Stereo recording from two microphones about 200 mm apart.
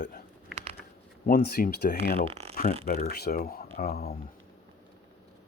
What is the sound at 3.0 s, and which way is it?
Speech, 50° left (ahead or behind).